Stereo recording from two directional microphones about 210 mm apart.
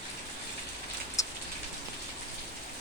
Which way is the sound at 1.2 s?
15° left (ahead or behind).